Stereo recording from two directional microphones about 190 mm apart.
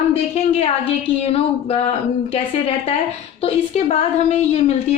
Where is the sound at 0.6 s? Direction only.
30° left (ahead or behind).